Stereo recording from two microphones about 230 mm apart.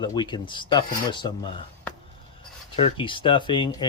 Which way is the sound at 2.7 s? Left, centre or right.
Left.